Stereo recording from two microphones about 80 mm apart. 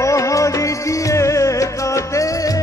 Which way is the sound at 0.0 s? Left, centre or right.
Left.